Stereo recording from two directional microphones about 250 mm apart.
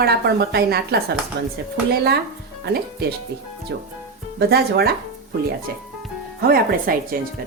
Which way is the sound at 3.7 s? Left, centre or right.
Right.